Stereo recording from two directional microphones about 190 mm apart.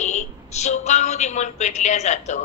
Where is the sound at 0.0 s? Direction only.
35° left (ahead or behind).